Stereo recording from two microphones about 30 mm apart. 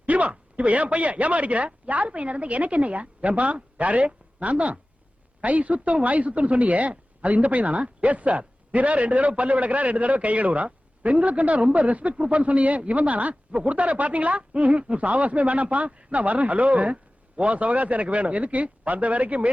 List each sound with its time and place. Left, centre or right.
0.0 s speech: right